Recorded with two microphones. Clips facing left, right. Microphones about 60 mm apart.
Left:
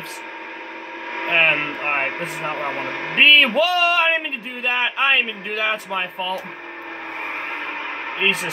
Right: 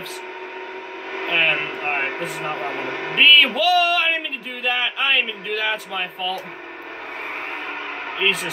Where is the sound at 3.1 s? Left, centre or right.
Left.